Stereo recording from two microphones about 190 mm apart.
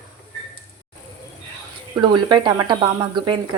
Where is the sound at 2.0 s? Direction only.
25° right (ahead or behind).